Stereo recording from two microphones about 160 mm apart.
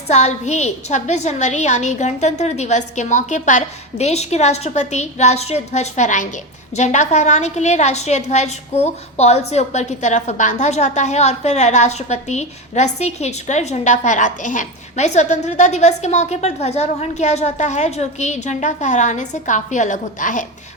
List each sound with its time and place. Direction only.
0.1 s a woman's voice: 45° left (ahead or behind)